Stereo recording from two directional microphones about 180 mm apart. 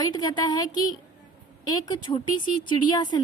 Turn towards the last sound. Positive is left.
turn(degrees=25)  # may be behind; listen again after turning